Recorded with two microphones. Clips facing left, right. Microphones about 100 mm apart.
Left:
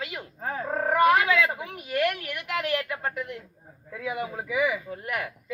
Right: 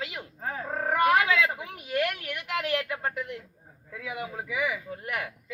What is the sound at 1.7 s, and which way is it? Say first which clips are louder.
A woman's voice: left 4 dB; 25° right (ahead or behind).